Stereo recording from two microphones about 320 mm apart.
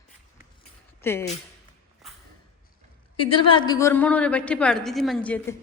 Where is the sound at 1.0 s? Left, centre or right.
Centre.